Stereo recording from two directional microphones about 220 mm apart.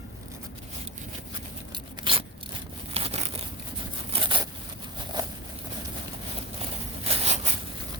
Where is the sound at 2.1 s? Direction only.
20° right (ahead or behind).